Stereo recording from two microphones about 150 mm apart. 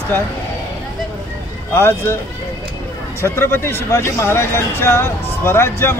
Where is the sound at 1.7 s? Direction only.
15° left (ahead or behind).